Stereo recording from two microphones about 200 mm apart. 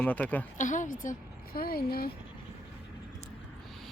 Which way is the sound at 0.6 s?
40° left (ahead or behind).